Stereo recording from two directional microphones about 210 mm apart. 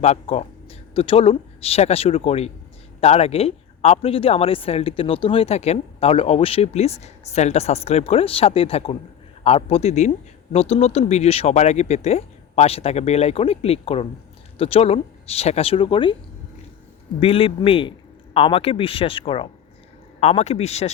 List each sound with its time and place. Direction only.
0.0 s speech: 30° left (ahead or behind)
17.2 s speech: 25° left (ahead or behind)